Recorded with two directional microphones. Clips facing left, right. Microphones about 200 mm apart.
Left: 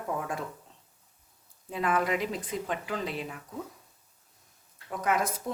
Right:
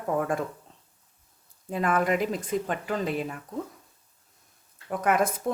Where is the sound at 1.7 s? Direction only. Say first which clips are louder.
Right 3 dB; 50° right (ahead or behind).